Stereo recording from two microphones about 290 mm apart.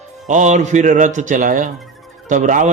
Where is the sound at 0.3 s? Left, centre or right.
Right.